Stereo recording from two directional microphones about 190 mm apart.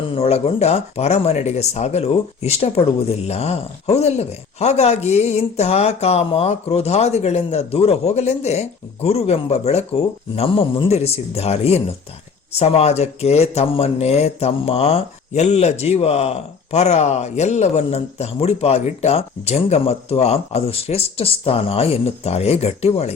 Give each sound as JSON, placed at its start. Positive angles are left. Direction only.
{"t": 0.1, "sound": "speech", "side_deg": 30}